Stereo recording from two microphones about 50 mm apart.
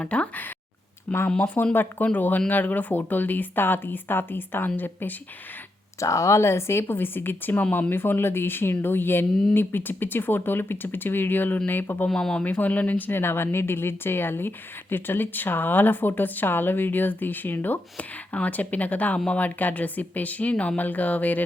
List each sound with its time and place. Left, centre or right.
0.0 s speech: left
1.7 s speech: left
6.0 s speech: left
12.0 s speech: centre
12.4 s speech: left
17.9 s speech: left